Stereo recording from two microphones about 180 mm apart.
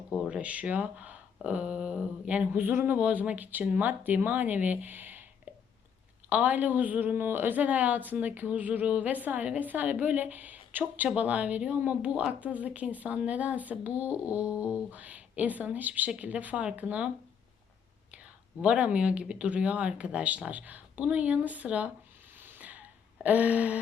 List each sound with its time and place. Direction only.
0.2 s a woman's voice: 5° right (ahead or behind)
6.2 s a woman's voice: 10° right (ahead or behind)
18.6 s a woman's voice: 5° right (ahead or behind)
22.4 s a sound: 10° right (ahead or behind)